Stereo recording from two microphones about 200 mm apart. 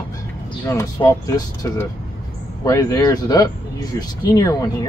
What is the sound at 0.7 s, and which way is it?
Speech, 15° left (ahead or behind).